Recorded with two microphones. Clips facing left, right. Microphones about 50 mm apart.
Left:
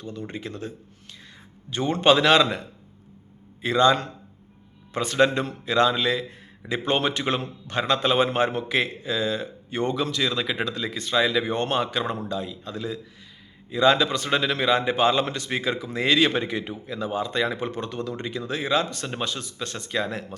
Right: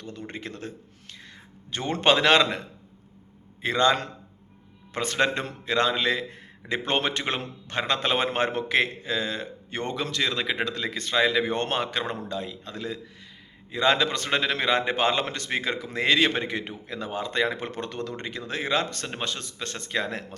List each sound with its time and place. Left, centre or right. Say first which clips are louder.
0.0 s speech: left 3 dB; right
1.7 s speech: left 3 dB; right